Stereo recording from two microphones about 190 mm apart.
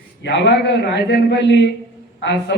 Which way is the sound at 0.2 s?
65° left (ahead or behind).